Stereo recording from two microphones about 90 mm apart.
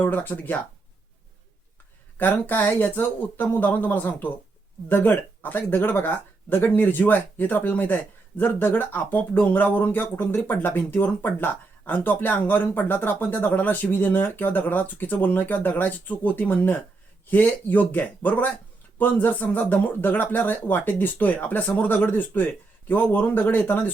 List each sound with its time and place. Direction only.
0.0 s speech: 20° left (ahead or behind)
2.1 s speech: 20° left (ahead or behind)